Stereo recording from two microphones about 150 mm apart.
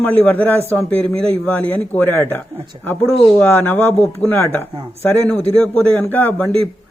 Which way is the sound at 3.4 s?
15° left (ahead or behind).